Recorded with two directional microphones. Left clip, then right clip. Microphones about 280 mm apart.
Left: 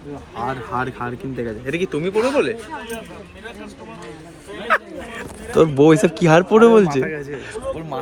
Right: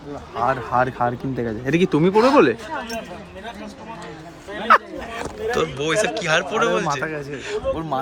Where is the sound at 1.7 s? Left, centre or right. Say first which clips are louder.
Right 5 dB; right.